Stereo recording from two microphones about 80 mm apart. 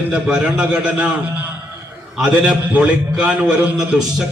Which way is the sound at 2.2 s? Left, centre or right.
Centre.